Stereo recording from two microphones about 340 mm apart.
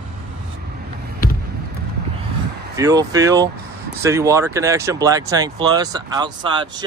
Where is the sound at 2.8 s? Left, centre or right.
Centre.